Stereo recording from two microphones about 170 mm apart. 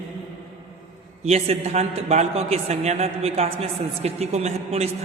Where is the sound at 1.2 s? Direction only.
40° right (ahead or behind).